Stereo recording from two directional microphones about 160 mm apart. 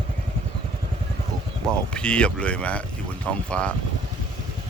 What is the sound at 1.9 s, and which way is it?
Speech, 5° left (ahead or behind).